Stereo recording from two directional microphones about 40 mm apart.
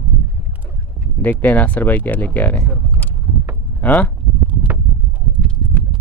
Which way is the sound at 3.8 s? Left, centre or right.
Left.